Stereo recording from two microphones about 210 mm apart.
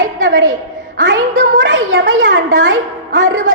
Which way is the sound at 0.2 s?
65° right (ahead or behind).